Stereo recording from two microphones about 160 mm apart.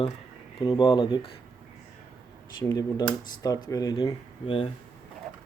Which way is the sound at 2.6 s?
25° left (ahead or behind).